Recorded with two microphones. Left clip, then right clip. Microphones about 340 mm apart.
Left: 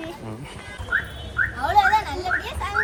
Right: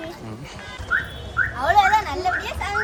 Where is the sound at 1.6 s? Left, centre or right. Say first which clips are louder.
Right 2 dB; centre.